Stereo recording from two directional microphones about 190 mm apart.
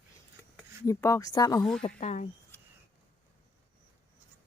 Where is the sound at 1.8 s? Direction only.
35° left (ahead or behind).